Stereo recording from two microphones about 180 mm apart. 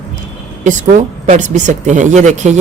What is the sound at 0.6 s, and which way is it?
A woman's voice, 45° right (ahead or behind).